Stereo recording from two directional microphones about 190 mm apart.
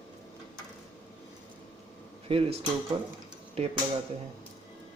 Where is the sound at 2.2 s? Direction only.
30° right (ahead or behind).